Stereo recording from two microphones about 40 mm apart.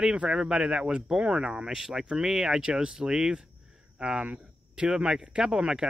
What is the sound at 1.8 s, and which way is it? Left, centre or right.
Speech, centre.